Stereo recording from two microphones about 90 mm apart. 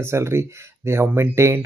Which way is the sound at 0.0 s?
30° right (ahead or behind).